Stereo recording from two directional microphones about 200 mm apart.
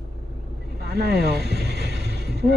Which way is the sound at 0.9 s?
55° right (ahead or behind).